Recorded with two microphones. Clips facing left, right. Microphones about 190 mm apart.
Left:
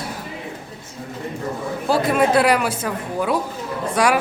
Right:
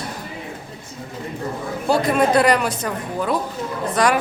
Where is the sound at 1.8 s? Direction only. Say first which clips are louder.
Even; 5° left (ahead or behind).